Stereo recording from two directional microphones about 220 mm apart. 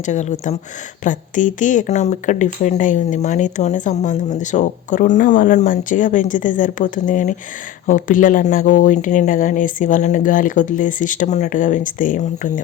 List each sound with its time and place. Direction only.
0.0 s speech: 35° left (ahead or behind)